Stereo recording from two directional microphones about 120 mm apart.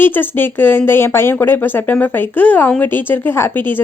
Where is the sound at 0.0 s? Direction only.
15° left (ahead or behind).